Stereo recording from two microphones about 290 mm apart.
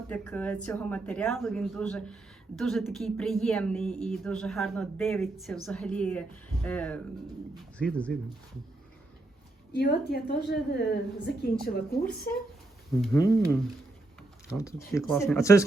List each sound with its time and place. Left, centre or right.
0.1 s speech: centre
9.7 s a woman's voice: left
13.1 s speech: centre